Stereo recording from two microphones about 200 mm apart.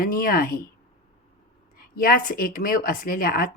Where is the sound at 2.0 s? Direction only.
45° left (ahead or behind).